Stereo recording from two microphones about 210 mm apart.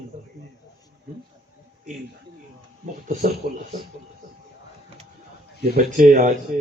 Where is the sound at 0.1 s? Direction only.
35° right (ahead or behind).